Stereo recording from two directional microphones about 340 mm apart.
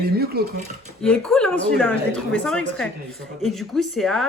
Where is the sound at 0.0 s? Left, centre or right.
Right.